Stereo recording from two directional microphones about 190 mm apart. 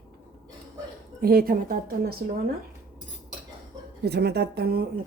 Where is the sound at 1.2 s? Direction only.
55° right (ahead or behind).